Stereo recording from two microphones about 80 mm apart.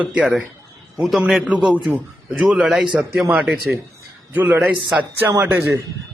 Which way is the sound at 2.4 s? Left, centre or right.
Centre.